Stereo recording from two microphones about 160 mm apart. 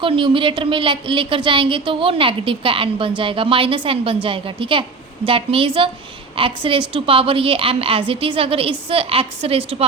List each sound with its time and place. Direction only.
0.0 s a woman's voice: 35° right (ahead or behind)